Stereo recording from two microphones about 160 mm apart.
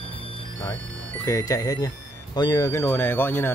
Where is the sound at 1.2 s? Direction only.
20° left (ahead or behind).